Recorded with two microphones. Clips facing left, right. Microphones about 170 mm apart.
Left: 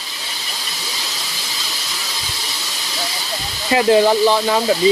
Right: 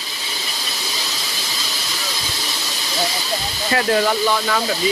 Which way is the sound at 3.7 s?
20° left (ahead or behind).